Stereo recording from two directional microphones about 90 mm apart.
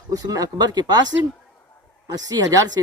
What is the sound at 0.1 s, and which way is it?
Speech, 45° right (ahead or behind).